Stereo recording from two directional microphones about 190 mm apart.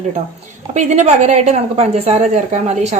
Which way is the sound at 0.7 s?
40° right (ahead or behind).